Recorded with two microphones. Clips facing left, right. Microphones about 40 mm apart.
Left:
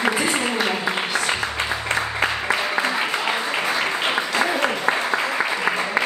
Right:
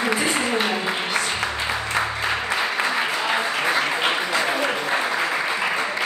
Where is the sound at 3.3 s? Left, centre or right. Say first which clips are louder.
Right 1 dB; centre.